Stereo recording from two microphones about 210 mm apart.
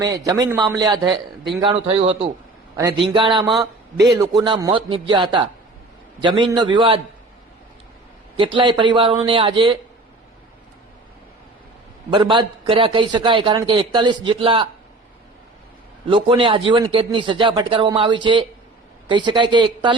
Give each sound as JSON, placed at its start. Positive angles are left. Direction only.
{"t": 0.0, "sound": "a man's voice", "side_deg": -15}
{"t": 8.4, "sound": "a man's voice", "side_deg": -25}
{"t": 12.1, "sound": "a man's voice", "side_deg": -20}
{"t": 16.0, "sound": "a man's voice", "side_deg": -25}